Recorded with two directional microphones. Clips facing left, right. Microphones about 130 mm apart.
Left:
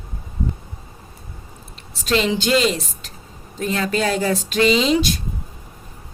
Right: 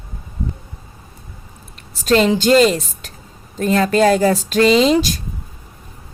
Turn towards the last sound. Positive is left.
turn(degrees=-45)  # may be behind; listen again after turning